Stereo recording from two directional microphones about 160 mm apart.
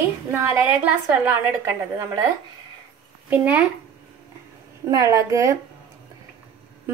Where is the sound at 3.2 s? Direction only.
10° right (ahead or behind).